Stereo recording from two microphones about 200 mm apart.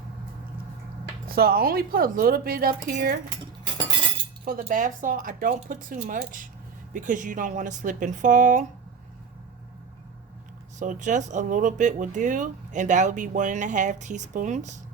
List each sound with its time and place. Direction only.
1.4 s speech: 50° right (ahead or behind)
4.6 s speech: 40° right (ahead or behind)
10.8 s speech: 40° right (ahead or behind)